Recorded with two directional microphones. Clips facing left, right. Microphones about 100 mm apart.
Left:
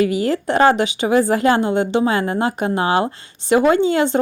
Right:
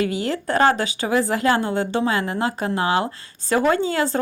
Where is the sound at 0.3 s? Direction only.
25° left (ahead or behind).